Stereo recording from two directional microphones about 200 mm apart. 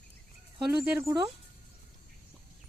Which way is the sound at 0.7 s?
5° right (ahead or behind).